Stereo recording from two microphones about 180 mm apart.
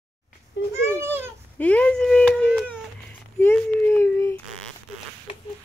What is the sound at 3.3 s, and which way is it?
Child singing, 10° left (ahead or behind).